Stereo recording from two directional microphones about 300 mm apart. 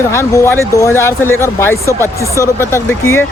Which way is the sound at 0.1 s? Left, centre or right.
Centre.